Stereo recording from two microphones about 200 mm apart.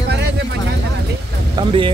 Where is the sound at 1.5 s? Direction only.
25° right (ahead or behind).